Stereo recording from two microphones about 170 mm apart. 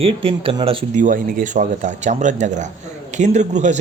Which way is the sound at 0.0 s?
30° right (ahead or behind).